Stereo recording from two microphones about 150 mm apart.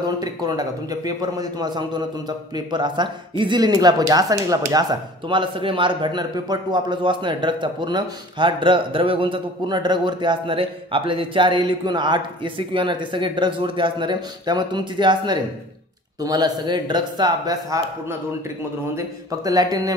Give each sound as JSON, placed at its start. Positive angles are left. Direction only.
{"t": 0.0, "sound": "a man's voice", "side_deg": -25}
{"t": 5.3, "sound": "a man's voice", "side_deg": -35}
{"t": 18.9, "sound": "a man's voice", "side_deg": -25}